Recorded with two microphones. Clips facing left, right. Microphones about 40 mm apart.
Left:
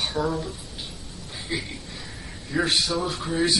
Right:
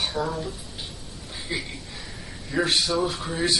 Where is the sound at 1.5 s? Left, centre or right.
Centre.